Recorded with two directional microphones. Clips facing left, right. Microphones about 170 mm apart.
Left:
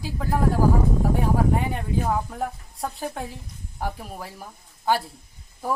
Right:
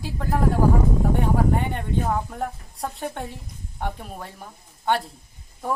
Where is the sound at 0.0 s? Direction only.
Centre (ahead or behind).